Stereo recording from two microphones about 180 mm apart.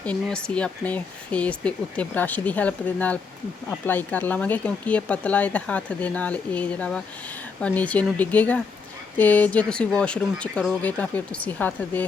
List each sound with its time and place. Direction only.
0.0 s speech: 5° left (ahead or behind)